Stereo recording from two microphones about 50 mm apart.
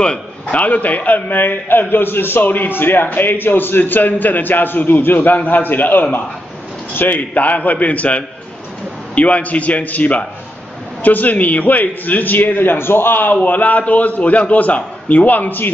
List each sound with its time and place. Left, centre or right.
0.0 s a man's voice: left